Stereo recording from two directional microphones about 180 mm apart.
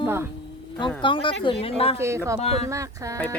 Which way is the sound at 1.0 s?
30° left (ahead or behind).